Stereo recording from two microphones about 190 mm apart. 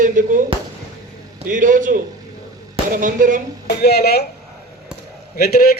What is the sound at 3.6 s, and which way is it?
Speech, 60° left (ahead or behind).